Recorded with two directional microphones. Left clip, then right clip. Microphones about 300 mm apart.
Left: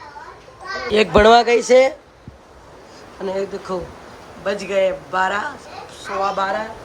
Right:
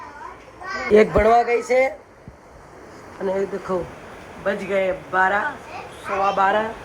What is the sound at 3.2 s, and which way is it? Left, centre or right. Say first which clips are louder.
A man's voice: even; centre.